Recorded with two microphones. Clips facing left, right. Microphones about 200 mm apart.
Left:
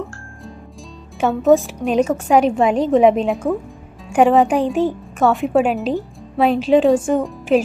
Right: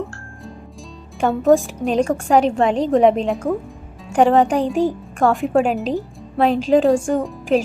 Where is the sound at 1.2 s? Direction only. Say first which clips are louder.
Left 1 dB; centre (ahead or behind).